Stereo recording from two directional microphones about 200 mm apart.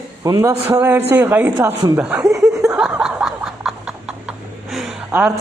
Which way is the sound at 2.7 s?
5° right (ahead or behind).